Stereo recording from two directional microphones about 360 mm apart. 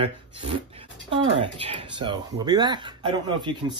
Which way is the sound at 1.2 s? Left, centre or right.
Centre.